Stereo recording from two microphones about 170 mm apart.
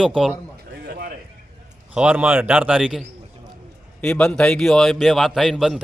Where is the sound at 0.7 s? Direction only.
75° right (ahead or behind).